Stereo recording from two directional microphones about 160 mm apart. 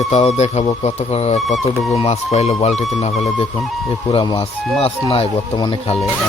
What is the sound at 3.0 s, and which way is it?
Speech, 40° left (ahead or behind).